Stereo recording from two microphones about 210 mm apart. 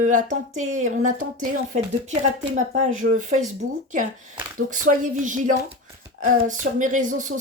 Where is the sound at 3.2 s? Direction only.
35° right (ahead or behind).